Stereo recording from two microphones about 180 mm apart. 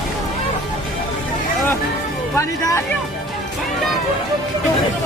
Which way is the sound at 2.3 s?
15° left (ahead or behind).